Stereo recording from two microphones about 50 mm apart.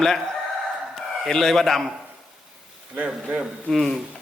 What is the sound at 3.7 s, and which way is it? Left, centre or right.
Speech, centre.